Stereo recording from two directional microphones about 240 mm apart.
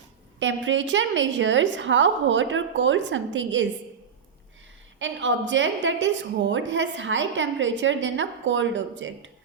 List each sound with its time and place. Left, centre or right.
0.3 s a woman's voice: right
4.9 s a woman's voice: right